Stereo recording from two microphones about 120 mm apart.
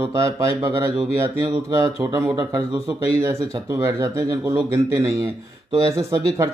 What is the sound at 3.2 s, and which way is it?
Speech, 20° right (ahead or behind).